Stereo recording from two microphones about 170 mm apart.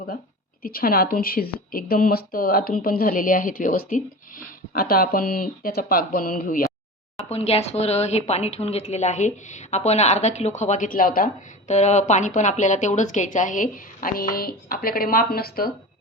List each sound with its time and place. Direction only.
0.6 s speech: 60° left (ahead or behind)
7.3 s a woman's voice: 35° left (ahead or behind); by 11.3 s 55° left (ahead or behind)
11.7 s a woman's voice: 40° left (ahead or behind); by 15.7 s 65° left (ahead or behind)